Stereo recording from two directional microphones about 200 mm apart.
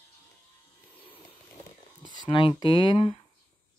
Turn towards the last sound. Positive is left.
turn(degrees=25)  # may be behind; listen again after turning